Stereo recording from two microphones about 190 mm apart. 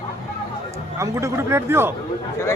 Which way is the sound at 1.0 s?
15° right (ahead or behind).